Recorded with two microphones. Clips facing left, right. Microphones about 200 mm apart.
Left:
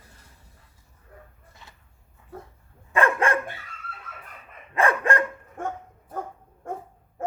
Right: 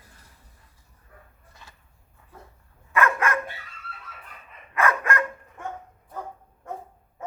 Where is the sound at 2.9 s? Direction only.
30° left (ahead or behind).